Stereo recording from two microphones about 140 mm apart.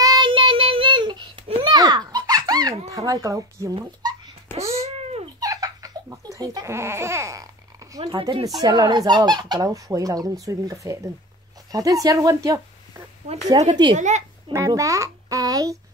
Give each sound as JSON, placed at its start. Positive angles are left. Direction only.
{"t": 0.0, "sound": "child singing", "side_deg": -30}
{"t": 2.9, "sound": "speech", "side_deg": -25}
{"t": 4.5, "sound": "cat", "side_deg": 15}
{"t": 5.4, "sound": "crying", "side_deg": -25}
{"t": 8.0, "sound": "speech", "side_deg": -35}
{"t": 13.3, "sound": "a child's voice", "side_deg": -50}
{"t": 14.5, "sound": "speech", "side_deg": -25}